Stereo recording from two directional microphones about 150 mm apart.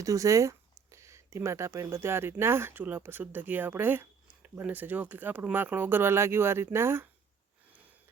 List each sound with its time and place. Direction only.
0.0 s speech: 20° right (ahead or behind)